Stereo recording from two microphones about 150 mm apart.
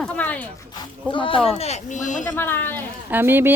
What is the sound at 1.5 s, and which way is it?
Speech, 45° left (ahead or behind).